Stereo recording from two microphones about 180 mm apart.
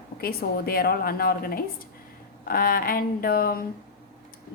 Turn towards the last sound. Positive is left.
turn(degrees=55)  # may be behind; listen again after turning